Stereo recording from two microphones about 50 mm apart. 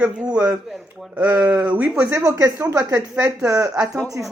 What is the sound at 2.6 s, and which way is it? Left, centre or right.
Speech, right.